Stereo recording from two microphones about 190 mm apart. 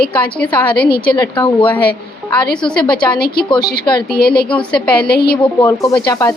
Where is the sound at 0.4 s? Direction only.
25° left (ahead or behind).